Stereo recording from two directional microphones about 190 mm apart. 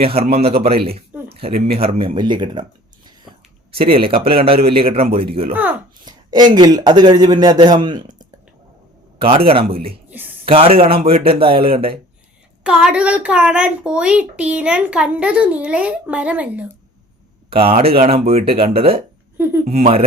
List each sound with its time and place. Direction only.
0.0 s speech: 30° right (ahead or behind)
1.3 s a sound: 30° right (ahead or behind)
1.6 s a man's voice: 30° right (ahead or behind)
10.1 s a sound: 10° right (ahead or behind)
10.4 s a man's voice: 30° right (ahead or behind)
12.6 s a child's voice: 5° right (ahead or behind)
17.5 s speech: 30° right (ahead or behind)
19.4 s speech: 10° right (ahead or behind)
19.6 s speech: 35° right (ahead or behind)